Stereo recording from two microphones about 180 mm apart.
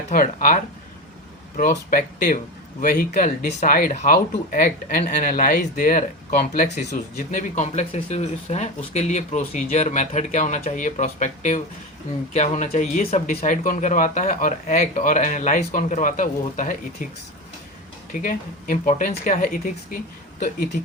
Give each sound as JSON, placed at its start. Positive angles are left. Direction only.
{"t": 0.1, "sound": "speech", "side_deg": 50}
{"t": 18.1, "sound": "speech", "side_deg": 50}